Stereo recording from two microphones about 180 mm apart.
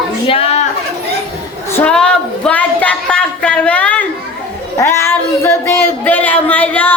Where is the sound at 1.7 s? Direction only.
10° left (ahead or behind).